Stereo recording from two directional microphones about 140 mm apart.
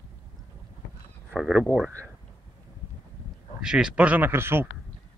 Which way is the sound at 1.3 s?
Centre (ahead or behind).